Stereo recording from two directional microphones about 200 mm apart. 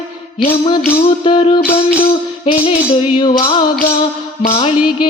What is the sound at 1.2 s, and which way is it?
Music, 25° left (ahead or behind).